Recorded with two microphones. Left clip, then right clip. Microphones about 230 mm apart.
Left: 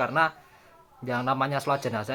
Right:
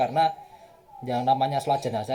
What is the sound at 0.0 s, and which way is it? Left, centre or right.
Speech, centre.